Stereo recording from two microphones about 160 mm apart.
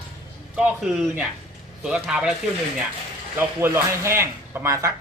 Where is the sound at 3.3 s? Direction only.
15° right (ahead or behind).